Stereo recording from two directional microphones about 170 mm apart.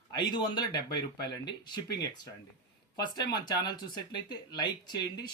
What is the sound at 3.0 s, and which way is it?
Speech, 25° left (ahead or behind).